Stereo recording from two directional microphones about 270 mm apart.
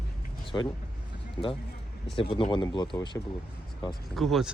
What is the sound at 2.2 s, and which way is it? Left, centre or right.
Speech, centre.